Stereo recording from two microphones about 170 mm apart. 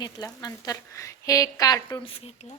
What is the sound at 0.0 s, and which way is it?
Speech, 20° left (ahead or behind).